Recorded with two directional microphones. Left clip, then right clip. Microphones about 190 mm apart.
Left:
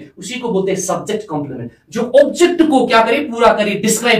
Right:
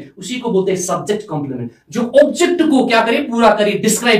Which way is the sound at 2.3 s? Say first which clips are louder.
Left 2 dB; 15° left (ahead or behind).